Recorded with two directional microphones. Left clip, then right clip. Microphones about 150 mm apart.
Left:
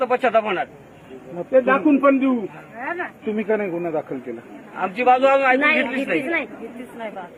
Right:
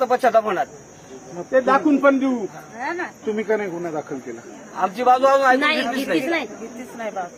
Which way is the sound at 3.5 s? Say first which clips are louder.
Left 3 dB; 25° left (ahead or behind).